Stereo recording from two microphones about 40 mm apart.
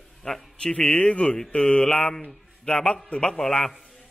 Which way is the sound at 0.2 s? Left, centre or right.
Centre.